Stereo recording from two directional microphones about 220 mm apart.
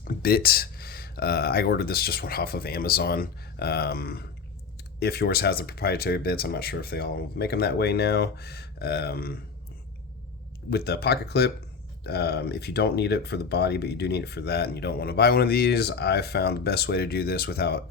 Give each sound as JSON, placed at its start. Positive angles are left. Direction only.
{"t": 0.0, "sound": "speech", "side_deg": 45}
{"t": 10.7, "sound": "speech", "side_deg": 45}